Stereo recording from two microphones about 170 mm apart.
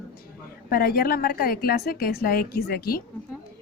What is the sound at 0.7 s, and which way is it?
A woman's voice, 60° left (ahead or behind).